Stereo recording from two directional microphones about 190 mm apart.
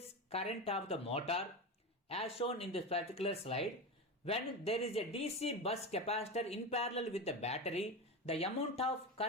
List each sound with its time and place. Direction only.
0.0 s speech: 35° left (ahead or behind)